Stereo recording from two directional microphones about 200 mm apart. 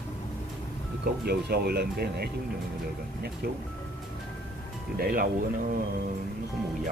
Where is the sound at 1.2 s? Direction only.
50° right (ahead or behind).